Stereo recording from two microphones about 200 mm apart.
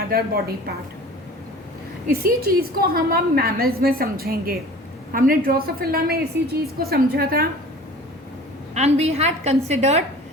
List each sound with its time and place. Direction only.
0.1 s a woman's voice: 50° right (ahead or behind)
2.0 s a woman's voice: 45° right (ahead or behind)
8.7 s a woman's voice: 35° right (ahead or behind)